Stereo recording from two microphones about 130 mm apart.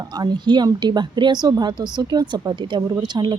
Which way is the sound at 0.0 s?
30° right (ahead or behind).